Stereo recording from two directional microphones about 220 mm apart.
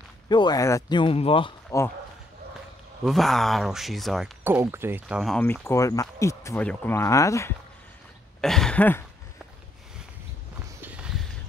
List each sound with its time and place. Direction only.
0.3 s speech: 20° left (ahead or behind)
3.1 s speech: centre (ahead or behind)
4.6 s speech: 10° right (ahead or behind); by 7.5 s 15° left (ahead or behind)
8.4 s throat clearing: centre (ahead or behind)
10.8 s a sound: 5° right (ahead or behind)